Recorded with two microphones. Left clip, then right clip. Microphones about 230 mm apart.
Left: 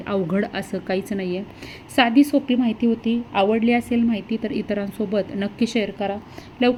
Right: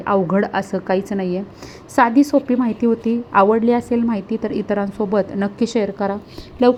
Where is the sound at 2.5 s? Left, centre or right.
Right.